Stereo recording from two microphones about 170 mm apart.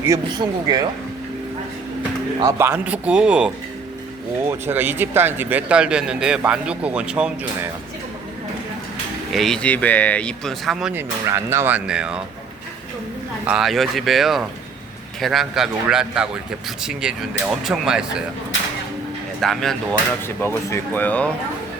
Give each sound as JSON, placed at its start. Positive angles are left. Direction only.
{"t": 0.0, "sound": "speech", "side_deg": -20}
{"t": 2.4, "sound": "speech", "side_deg": -15}
{"t": 9.3, "sound": "speech", "side_deg": 0}
{"t": 11.3, "sound": "speech", "side_deg": -15}
{"t": 13.5, "sound": "speech", "side_deg": 0}
{"t": 19.4, "sound": "speech", "side_deg": 0}
{"t": 20.2, "sound": "speech", "side_deg": 15}